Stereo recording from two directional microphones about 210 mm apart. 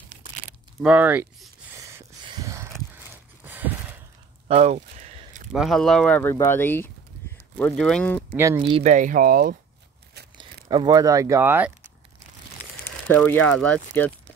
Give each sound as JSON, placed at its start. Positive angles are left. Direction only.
{"t": 0.8, "sound": "a sound", "side_deg": -5}
{"t": 4.5, "sound": "a sound", "side_deg": -30}
{"t": 5.5, "sound": "speech", "side_deg": 0}
{"t": 8.5, "sound": "speech", "side_deg": -25}
{"t": 10.3, "sound": "speech", "side_deg": -20}
{"t": 13.1, "sound": "speech", "side_deg": 5}